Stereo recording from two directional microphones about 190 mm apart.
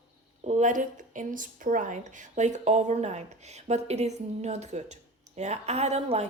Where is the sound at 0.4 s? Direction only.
40° right (ahead or behind).